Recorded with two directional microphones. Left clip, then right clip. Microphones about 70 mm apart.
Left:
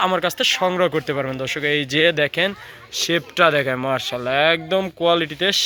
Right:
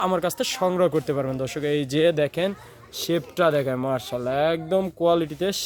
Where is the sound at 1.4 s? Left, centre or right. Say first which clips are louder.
Left 4 dB; right.